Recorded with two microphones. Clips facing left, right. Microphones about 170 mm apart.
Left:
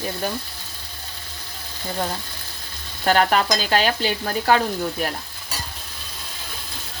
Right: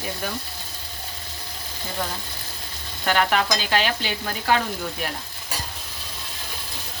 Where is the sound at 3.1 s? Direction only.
40° left (ahead or behind).